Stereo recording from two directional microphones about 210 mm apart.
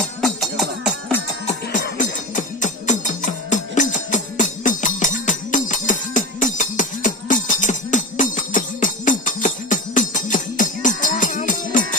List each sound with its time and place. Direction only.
0.2 s music: centre (ahead or behind)
1.5 s music: 35° left (ahead or behind)